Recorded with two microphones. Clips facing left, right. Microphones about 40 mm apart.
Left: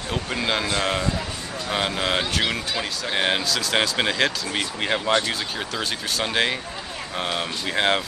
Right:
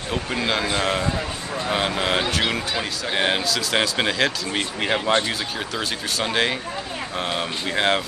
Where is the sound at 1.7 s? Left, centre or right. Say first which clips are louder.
Right 1 dB; centre.